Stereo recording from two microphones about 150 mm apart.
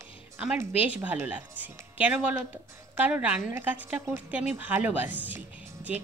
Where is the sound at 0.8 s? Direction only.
10° right (ahead or behind).